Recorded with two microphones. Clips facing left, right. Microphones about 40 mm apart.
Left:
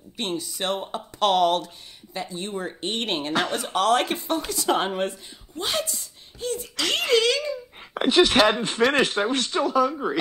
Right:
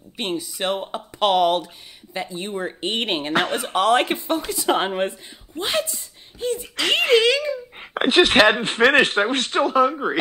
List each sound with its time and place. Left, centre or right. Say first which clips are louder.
0.2 s speech: right 3 dB; centre
7.8 s speech: right 2 dB; right